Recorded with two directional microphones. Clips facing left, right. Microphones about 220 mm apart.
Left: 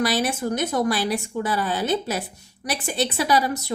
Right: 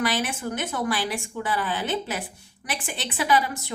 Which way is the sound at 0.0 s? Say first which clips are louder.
Left 4 dB; 40° left (ahead or behind).